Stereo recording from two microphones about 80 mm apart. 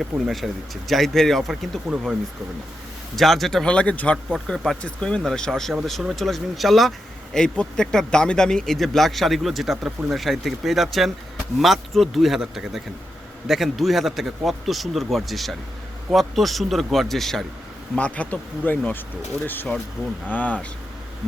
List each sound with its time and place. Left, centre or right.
0.0 s speech: centre
3.2 s speech: centre
4.4 s speech: centre
7.3 s speech: centre
17.9 s speech: centre
20.2 s speech: centre